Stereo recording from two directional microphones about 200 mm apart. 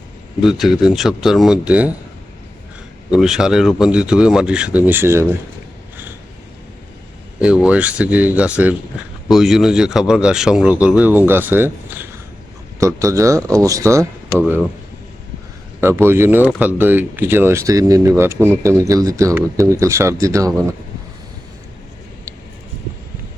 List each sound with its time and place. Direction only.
0.4 s speech: centre (ahead or behind)
3.1 s speech: centre (ahead or behind)
7.4 s speech: 5° right (ahead or behind)
15.8 s speech: 10° right (ahead or behind)